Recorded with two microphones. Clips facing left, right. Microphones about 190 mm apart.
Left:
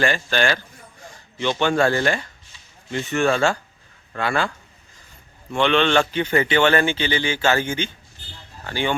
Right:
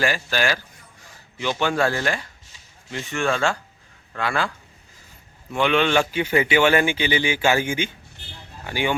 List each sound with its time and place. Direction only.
0.0 s speech: 5° right (ahead or behind)
3.2 s speech: 35° left (ahead or behind)
4.2 s a man's voice: centre (ahead or behind)